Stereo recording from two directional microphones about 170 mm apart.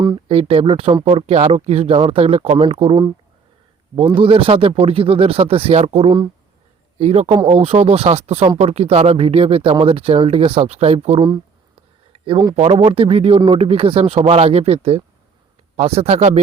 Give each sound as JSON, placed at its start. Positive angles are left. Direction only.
{"t": 0.3, "sound": "speech", "side_deg": -35}